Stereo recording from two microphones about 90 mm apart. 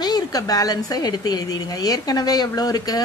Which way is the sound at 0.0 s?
45° left (ahead or behind).